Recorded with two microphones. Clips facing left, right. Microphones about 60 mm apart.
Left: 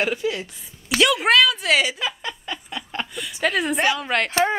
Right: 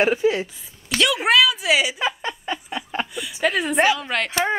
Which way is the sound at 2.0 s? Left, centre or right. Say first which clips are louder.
Right 3 dB; right.